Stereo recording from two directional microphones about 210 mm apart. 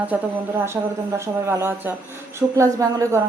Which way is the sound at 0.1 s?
5° right (ahead or behind).